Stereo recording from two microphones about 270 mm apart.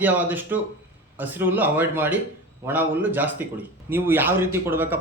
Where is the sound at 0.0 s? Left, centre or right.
Centre.